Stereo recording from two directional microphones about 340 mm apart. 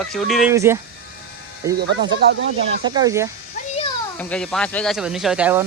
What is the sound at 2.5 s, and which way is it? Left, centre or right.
Speech, centre.